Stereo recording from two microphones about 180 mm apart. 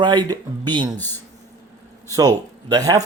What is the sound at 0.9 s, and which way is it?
Speech, 10° left (ahead or behind).